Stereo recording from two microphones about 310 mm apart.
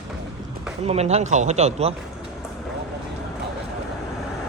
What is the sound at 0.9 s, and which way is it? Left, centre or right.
Speech, right.